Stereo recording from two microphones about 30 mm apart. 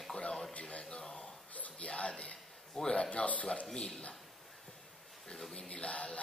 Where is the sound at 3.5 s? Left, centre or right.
Left.